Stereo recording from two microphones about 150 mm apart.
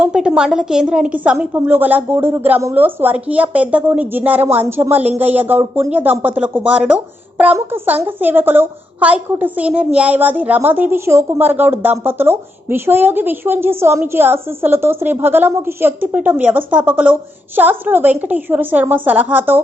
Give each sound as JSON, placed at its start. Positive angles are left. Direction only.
{"t": 0.0, "sound": "a woman's voice", "side_deg": -5}